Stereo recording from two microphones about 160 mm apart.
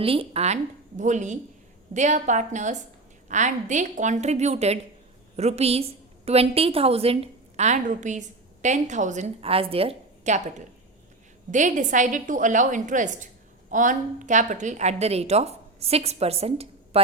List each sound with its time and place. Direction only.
0.0 s a woman's voice: 35° right (ahead or behind)
11.5 s a woman's voice: 50° right (ahead or behind)